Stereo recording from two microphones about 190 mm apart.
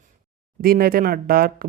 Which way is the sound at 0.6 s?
50° right (ahead or behind).